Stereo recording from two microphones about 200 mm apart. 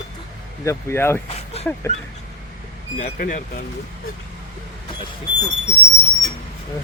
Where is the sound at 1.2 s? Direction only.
30° left (ahead or behind).